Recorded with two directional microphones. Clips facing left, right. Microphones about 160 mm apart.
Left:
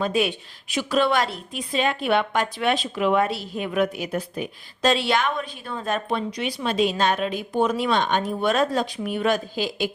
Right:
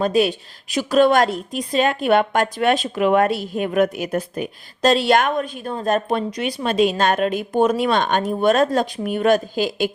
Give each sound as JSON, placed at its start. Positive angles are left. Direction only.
{"t": 0.0, "sound": "a woman's voice", "side_deg": -40}